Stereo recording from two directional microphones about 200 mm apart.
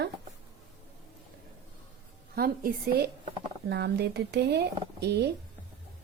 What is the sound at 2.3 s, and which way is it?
A woman's voice, 50° right (ahead or behind).